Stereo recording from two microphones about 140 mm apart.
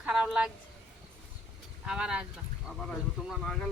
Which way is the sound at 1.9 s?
5° right (ahead or behind).